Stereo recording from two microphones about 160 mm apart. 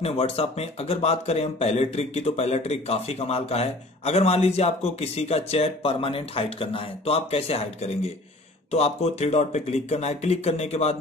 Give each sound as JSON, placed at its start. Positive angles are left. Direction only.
{"t": 0.0, "sound": "speech", "side_deg": 40}